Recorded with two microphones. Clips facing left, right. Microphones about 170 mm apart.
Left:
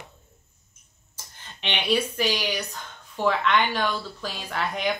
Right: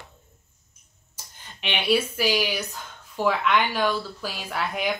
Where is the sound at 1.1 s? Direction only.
10° right (ahead or behind).